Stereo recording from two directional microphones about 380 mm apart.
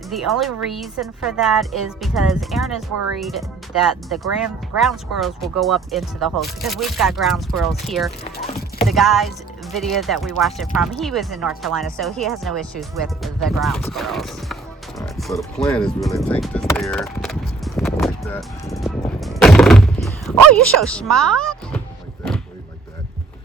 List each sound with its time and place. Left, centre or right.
0.1 s speech: centre
8.2 s speech: centre
8.8 s speech: centre
17.7 s gunshot: centre
20.5 s speech: centre